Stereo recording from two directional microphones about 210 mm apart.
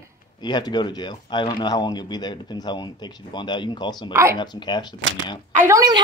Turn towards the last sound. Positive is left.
turn(degrees=-15)  # may be behind; listen again after turning